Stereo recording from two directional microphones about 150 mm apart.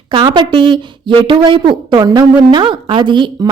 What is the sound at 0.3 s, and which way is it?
A woman's voice, 30° right (ahead or behind).